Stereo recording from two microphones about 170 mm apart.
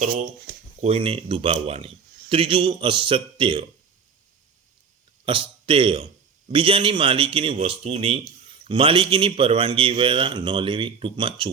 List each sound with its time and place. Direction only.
0.0 s speech: 65° right (ahead or behind)
0.8 s a man's voice: 35° right (ahead or behind)
5.2 s a man's voice: 30° right (ahead or behind)